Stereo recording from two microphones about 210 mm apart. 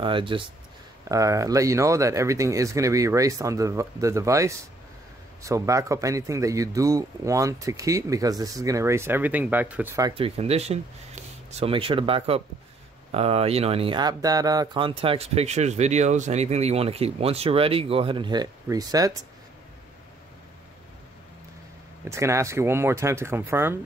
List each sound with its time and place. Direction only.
0.0 s a man's voice: 25° right (ahead or behind)
22.0 s a man's voice: 15° right (ahead or behind)